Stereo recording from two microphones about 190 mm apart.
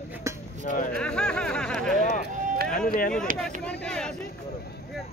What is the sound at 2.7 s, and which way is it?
Speech, 45° left (ahead or behind).